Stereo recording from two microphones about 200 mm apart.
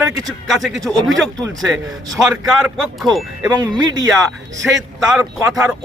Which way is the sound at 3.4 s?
15° right (ahead or behind).